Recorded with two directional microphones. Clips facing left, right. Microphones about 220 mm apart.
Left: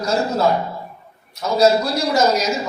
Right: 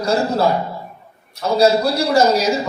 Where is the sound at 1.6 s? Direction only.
30° right (ahead or behind).